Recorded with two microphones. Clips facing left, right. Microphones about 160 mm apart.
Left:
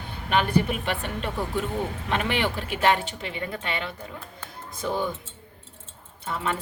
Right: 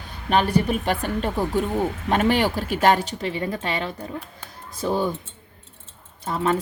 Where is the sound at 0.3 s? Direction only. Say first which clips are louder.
Right 3 dB; 35° right (ahead or behind).